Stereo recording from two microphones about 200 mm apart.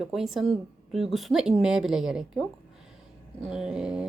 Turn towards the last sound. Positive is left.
turn(degrees=-5)  # may be behind; listen again after turning